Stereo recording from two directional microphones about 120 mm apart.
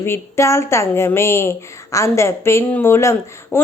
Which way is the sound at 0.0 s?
20° left (ahead or behind).